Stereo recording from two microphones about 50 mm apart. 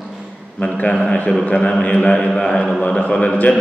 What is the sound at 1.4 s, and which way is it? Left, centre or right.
A man's voice, left.